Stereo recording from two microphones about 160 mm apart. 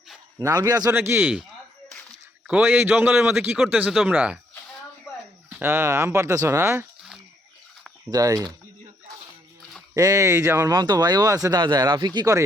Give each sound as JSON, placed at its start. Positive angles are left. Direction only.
{"t": 0.3, "sound": "a man's voice", "side_deg": -20}
{"t": 2.5, "sound": "a man's voice", "side_deg": -10}
{"t": 5.5, "sound": "a man's voice", "side_deg": -15}
{"t": 8.1, "sound": "speech", "side_deg": -20}
{"t": 9.9, "sound": "speech", "side_deg": -20}